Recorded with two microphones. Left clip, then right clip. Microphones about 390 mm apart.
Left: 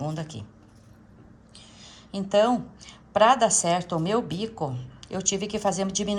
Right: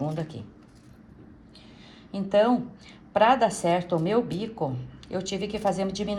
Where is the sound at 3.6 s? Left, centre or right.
Centre.